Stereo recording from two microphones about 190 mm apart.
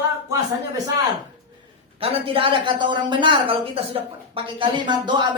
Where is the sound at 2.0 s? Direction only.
30° right (ahead or behind).